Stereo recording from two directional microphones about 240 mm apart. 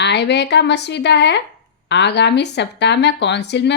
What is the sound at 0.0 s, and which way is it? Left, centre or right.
Speech, left.